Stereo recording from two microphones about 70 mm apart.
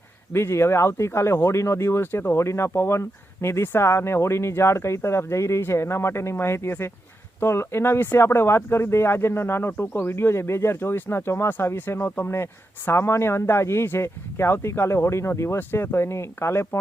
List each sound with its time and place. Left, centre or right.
0.3 s speech: left